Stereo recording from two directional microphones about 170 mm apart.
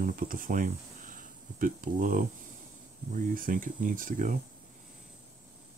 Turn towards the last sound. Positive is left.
turn(degrees=-50)  # may be behind; listen again after turning